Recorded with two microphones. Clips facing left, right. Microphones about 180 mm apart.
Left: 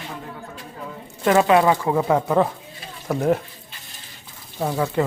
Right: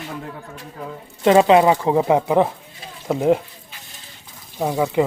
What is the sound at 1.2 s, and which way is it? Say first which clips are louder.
Speech: right 3 dB; 20° right (ahead or behind).